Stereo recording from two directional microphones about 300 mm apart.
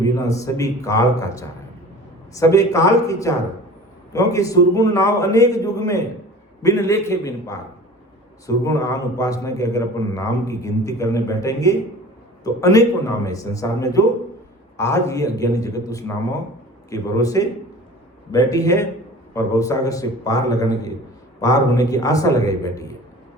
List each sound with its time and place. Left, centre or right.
0.0 s a man's voice: centre